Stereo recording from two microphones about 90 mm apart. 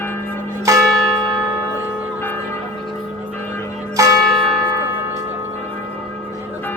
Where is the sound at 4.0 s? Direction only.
35° right (ahead or behind).